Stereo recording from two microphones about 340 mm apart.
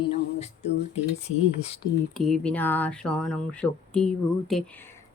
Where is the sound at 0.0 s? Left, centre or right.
Centre.